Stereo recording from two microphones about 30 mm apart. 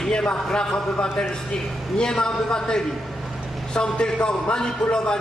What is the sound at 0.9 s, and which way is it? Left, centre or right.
Speech, left.